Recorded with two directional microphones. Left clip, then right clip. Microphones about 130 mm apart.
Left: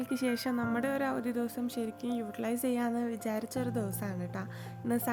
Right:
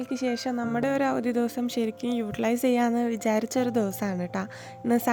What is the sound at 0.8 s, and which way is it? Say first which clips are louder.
A woman's voice: right 11 dB; 55° right (ahead or behind).